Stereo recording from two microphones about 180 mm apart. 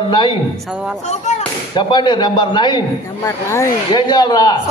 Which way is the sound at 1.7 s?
25° left (ahead or behind).